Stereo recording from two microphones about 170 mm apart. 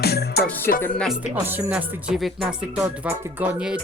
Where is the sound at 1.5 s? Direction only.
10° right (ahead or behind).